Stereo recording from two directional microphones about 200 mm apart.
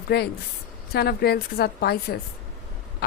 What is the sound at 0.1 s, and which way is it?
Speech, 50° left (ahead or behind).